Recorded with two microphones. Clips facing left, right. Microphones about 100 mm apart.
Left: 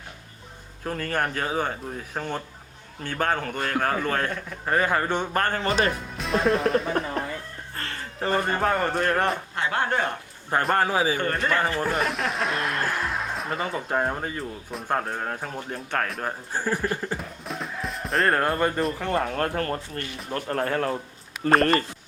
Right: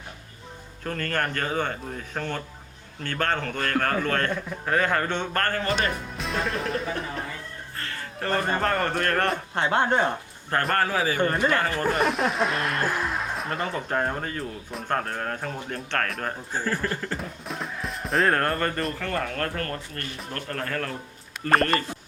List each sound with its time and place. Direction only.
0.9 s a man's voice: 10° left (ahead or behind)
5.6 s speech: 40° left (ahead or behind)
5.9 s speech: centre (ahead or behind)
8.2 s speech: 5° left (ahead or behind)
9.6 s speech: 25° right (ahead or behind)
10.8 s a man's voice: 15° left (ahead or behind)
11.3 s a man's voice: 10° right (ahead or behind)
11.8 s a man's voice: centre (ahead or behind)
17.2 s music: centre (ahead or behind)
18.9 s speech: 20° left (ahead or behind)